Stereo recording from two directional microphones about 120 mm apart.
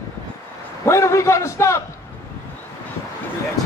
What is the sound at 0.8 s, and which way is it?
A man's voice, 25° left (ahead or behind).